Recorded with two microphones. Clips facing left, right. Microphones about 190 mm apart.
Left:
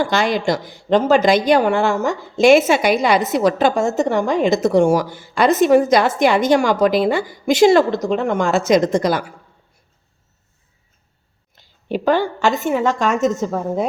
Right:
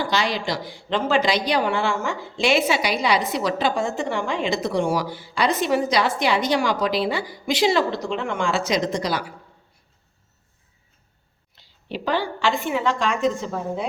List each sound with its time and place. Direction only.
0.0 s a woman's voice: 50° left (ahead or behind)
11.5 s a woman's voice: 50° left (ahead or behind)